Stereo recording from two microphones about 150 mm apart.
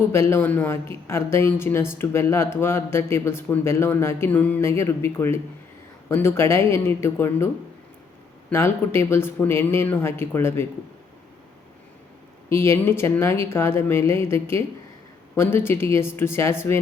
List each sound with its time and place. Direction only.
0.0 s a woman's voice: 15° left (ahead or behind)
12.5 s a woman's voice: 20° left (ahead or behind)